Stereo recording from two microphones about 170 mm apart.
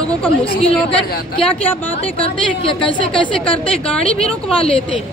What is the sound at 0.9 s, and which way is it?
Speech, 5° left (ahead or behind).